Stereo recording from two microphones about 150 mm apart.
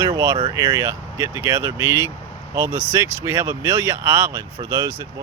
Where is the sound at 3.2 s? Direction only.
15° right (ahead or behind).